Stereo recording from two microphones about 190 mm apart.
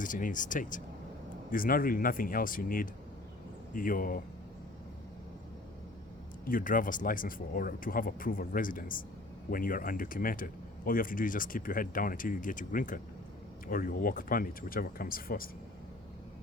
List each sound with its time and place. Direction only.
0.0 s speech: 45° left (ahead or behind)
6.5 s speech: 45° left (ahead or behind)